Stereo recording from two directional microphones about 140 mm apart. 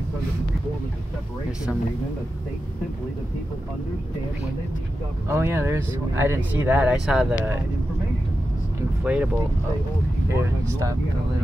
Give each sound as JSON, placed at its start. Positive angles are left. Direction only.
{"t": 5.3, "sound": "speech", "side_deg": -20}
{"t": 9.0, "sound": "speech", "side_deg": -10}
{"t": 10.3, "sound": "speech", "side_deg": -20}